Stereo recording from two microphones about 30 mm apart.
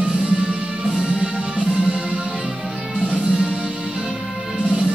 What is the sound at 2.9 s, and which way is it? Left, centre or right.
Music, right.